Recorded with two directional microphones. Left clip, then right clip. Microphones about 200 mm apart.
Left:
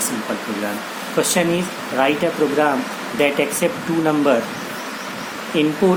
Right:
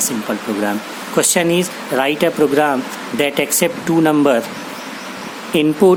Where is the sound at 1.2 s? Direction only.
50° right (ahead or behind).